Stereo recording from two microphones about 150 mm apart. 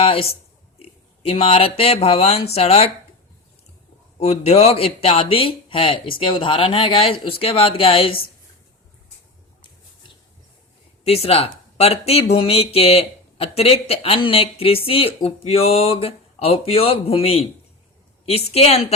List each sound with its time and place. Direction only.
0.0 s a woman's voice: 40° left (ahead or behind)
4.2 s speech: 45° left (ahead or behind)
11.0 s a woman's voice: 40° left (ahead or behind)